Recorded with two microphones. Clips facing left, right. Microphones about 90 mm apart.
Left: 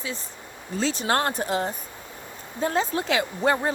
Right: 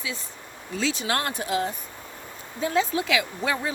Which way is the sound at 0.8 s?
40° left (ahead or behind).